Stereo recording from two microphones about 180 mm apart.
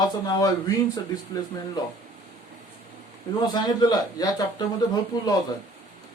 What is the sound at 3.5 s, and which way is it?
Speech, 20° left (ahead or behind).